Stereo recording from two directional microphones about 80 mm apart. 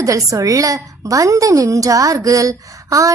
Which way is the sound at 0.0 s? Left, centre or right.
Right.